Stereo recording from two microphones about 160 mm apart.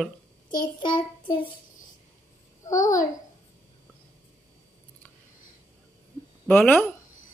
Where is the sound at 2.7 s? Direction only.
20° left (ahead or behind).